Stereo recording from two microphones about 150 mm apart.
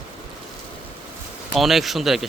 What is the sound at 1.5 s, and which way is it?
Speech, centre (ahead or behind).